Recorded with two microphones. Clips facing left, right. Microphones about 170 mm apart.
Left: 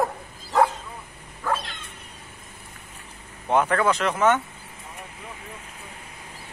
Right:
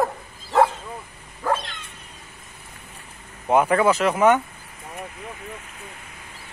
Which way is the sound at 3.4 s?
10° right (ahead or behind).